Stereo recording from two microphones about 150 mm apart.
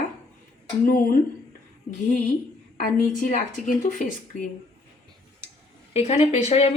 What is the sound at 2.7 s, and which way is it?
Speech, 70° left (ahead or behind).